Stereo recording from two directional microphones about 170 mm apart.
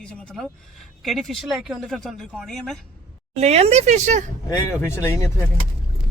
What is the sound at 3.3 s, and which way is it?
Speech, 40° right (ahead or behind).